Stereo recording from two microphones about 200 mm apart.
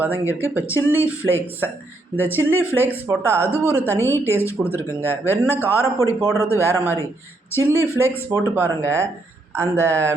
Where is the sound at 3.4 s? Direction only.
10° left (ahead or behind).